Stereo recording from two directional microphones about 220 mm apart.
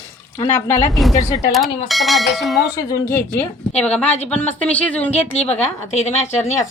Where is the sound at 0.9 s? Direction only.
Centre (ahead or behind).